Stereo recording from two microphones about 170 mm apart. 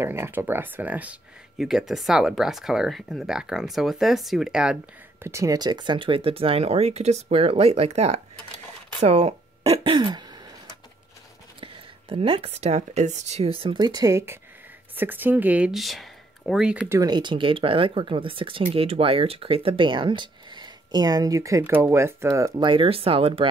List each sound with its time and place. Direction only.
0.0 s speech: 15° right (ahead or behind)
5.2 s speech: 15° right (ahead or behind); by 9.3 s 40° right (ahead or behind)
9.7 s throat clearing: 30° right (ahead or behind)
11.6 s speech: 35° right (ahead or behind); by 17.0 s 10° right (ahead or behind)
17.0 s speech: 25° right (ahead or behind)